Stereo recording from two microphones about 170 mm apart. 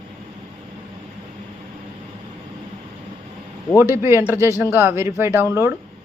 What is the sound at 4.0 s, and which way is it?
Speech, 15° right (ahead or behind).